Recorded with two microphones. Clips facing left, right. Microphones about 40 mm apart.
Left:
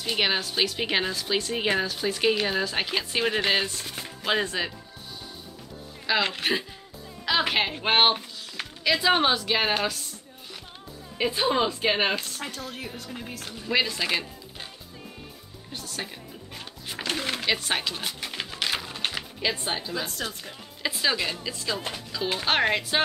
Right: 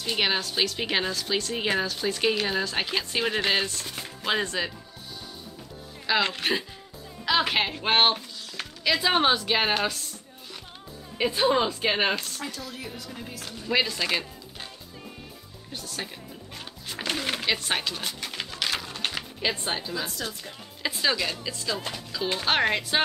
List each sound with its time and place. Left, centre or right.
0.0 s speech: centre
6.0 s speech: centre
11.1 s speech: centre
12.4 s speech: left
13.5 s speech: centre
15.7 s speech: centre
17.0 s a sound: centre
20.2 s speech: centre